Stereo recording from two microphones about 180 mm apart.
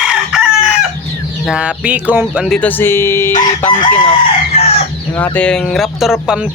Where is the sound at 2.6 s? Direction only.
10° left (ahead or behind).